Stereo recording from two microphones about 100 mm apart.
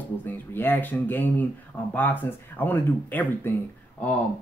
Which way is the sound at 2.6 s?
20° left (ahead or behind).